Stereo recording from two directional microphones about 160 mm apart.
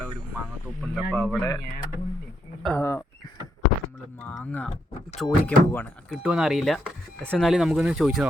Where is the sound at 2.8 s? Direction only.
20° left (ahead or behind).